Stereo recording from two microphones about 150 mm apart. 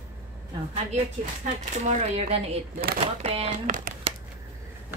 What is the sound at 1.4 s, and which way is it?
Speech, 50° right (ahead or behind).